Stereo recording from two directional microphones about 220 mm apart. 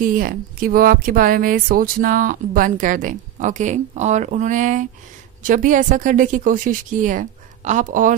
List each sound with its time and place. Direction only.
0.0 s speech: 40° right (ahead or behind)